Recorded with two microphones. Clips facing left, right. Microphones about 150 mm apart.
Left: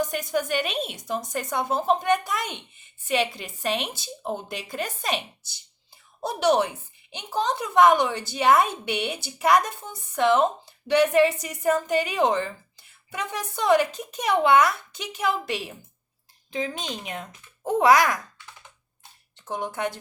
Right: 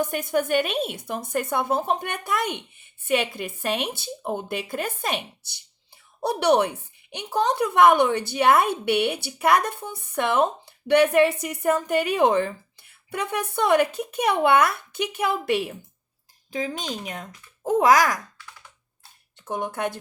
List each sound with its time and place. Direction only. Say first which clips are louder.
0.0 s a woman's voice: right 2 dB; 55° right (ahead or behind)
16.5 s a woman's voice: right 1 dB; 40° right (ahead or behind)
19.5 s a woman's voice: right 1 dB; 50° right (ahead or behind)